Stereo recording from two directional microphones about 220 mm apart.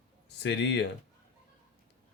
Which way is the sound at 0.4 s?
50° left (ahead or behind).